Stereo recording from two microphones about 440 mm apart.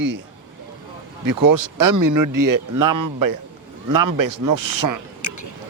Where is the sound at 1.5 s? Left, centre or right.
Right.